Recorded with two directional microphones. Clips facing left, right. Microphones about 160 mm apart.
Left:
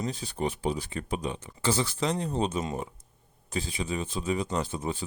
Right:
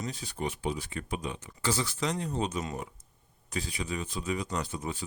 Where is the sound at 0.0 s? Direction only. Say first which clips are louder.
Left 4 dB; 30° left (ahead or behind).